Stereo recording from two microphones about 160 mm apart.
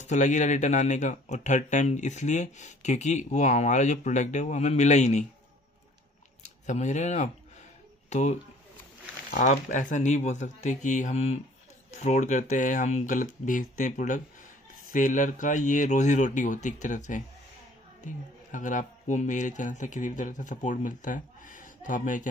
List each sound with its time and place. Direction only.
0.0 s speech: 50° left (ahead or behind)
6.4 s speech: 45° left (ahead or behind)